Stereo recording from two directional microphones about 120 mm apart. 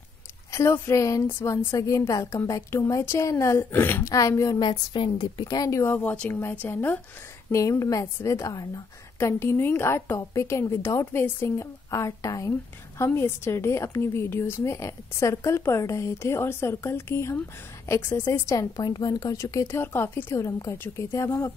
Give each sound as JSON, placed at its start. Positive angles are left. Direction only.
{"t": 0.5, "sound": "a woman's voice", "side_deg": 25}
{"t": 4.0, "sound": "a woman's voice", "side_deg": 30}
{"t": 4.6, "sound": "a woman's voice", "side_deg": 40}
{"t": 7.5, "sound": "a woman's voice", "side_deg": 25}
{"t": 18.8, "sound": "a woman's voice", "side_deg": 35}